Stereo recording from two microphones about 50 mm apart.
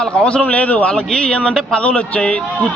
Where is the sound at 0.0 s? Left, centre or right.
Centre.